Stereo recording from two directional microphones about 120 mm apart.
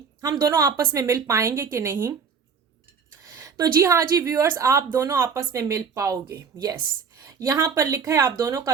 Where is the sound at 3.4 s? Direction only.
30° right (ahead or behind).